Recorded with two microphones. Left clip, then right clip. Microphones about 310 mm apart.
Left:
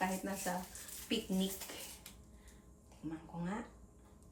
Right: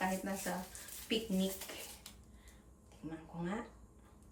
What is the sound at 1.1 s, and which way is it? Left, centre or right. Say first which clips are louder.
Speech: right 2 dB; centre.